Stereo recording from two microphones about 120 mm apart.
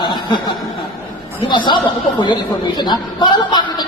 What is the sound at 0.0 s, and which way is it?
Chuckle, 40° left (ahead or behind).